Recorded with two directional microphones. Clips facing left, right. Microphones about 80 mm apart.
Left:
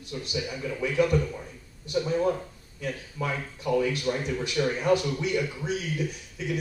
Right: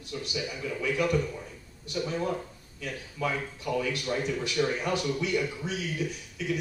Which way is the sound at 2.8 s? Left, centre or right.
Left.